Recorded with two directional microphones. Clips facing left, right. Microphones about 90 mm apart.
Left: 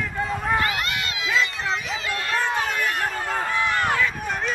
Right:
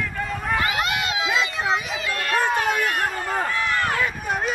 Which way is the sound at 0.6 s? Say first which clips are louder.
Right 2 dB; 15° right (ahead or behind).